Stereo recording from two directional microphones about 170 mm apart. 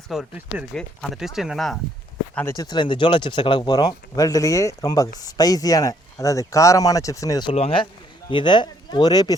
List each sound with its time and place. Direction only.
0.1 s speech: 5° right (ahead or behind)
2.6 s speech: 25° left (ahead or behind)
7.5 s speech: 35° left (ahead or behind)